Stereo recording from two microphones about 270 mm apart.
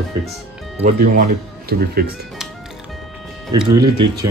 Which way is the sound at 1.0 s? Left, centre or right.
Right.